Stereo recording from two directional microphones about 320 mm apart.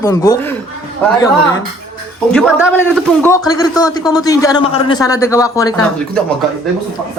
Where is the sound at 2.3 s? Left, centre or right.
Centre.